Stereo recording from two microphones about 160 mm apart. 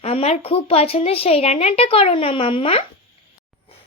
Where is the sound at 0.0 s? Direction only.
40° left (ahead or behind).